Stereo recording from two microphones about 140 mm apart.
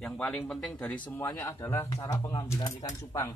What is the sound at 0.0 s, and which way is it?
Speech, 5° left (ahead or behind).